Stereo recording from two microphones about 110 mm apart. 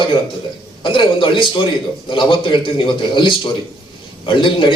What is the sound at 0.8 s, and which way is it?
A man's voice, 50° left (ahead or behind).